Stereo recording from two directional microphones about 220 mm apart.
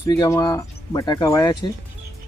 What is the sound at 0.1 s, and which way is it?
Speech, 15° left (ahead or behind).